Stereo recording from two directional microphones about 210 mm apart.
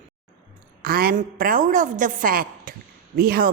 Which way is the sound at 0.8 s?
45° right (ahead or behind).